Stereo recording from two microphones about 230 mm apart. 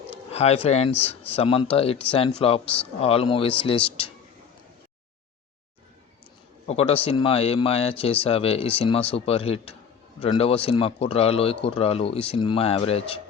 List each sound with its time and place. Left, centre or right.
0.1 s speech: left
6.7 s speech: left